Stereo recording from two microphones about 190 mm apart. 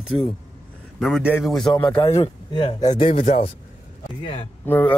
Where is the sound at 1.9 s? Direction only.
10° left (ahead or behind).